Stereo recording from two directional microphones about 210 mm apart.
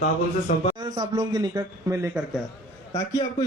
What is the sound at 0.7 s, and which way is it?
A man's voice, 20° right (ahead or behind).